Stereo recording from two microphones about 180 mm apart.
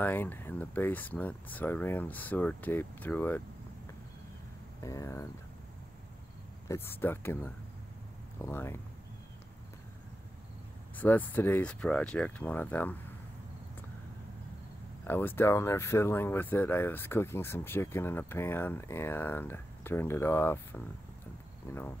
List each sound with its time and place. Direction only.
0.0 s speech: 10° left (ahead or behind)
4.8 s speech: 15° left (ahead or behind)
6.7 s speech: 10° left (ahead or behind)
11.0 s speech: 10° left (ahead or behind)
15.0 s speech: 10° left (ahead or behind)